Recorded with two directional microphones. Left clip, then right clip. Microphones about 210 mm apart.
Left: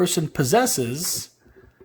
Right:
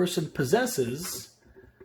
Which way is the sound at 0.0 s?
40° left (ahead or behind).